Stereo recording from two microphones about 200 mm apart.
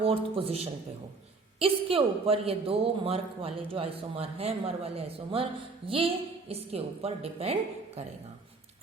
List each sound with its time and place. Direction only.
0.0 s a man's voice: 25° right (ahead or behind)